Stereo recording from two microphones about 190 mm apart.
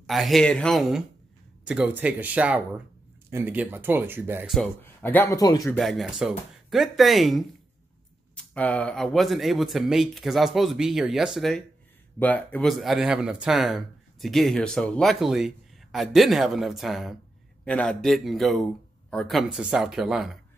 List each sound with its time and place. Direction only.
0.0 s speech: centre (ahead or behind)
4.6 s a man's voice: 10° left (ahead or behind)
5.8 s speech: centre (ahead or behind)